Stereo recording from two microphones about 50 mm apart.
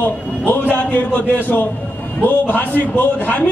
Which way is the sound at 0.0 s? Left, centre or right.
Left.